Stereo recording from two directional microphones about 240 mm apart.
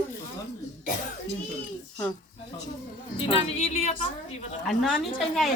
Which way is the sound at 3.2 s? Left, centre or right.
Left.